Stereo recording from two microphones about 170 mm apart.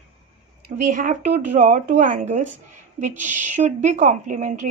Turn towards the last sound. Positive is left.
turn(degrees=-45)  # may be behind; listen again after turning